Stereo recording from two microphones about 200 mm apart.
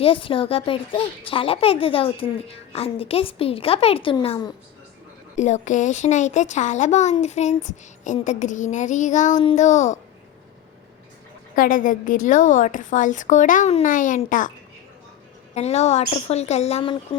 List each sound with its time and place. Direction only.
0.0 s speech: 25° left (ahead or behind)
5.4 s a woman's voice: 35° left (ahead or behind)
11.5 s a woman's voice: 45° left (ahead or behind)
15.5 s a woman's voice: 35° left (ahead or behind)